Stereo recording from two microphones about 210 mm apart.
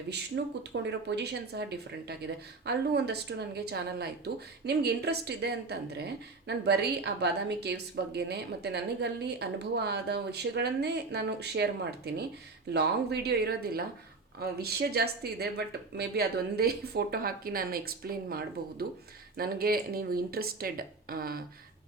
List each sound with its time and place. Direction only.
0.3 s a woman's voice: 60° right (ahead or behind)